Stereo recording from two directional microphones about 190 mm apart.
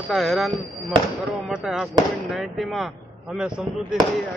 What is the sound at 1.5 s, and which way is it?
Speech, 5° right (ahead or behind).